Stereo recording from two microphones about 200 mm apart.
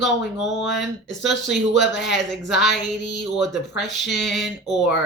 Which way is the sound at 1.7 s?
60° left (ahead or behind).